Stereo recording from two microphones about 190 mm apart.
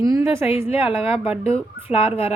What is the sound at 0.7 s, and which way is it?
Speech, 30° left (ahead or behind).